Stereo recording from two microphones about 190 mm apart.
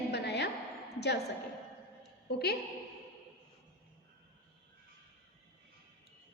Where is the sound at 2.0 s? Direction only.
60° left (ahead or behind).